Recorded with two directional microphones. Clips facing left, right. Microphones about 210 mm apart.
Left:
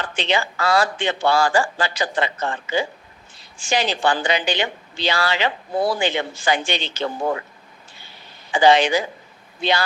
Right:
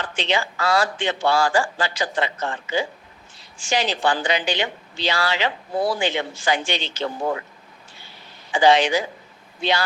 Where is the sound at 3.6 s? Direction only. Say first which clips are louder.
Left 1 dB; 55° left (ahead or behind).